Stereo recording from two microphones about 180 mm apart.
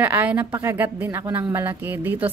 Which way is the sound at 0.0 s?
10° right (ahead or behind).